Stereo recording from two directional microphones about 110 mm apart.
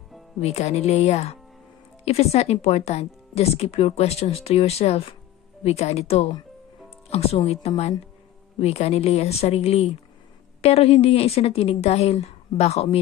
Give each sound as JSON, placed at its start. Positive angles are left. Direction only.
{"t": 0.4, "sound": "speech", "side_deg": 85}
{"t": 2.0, "sound": "speech", "side_deg": 65}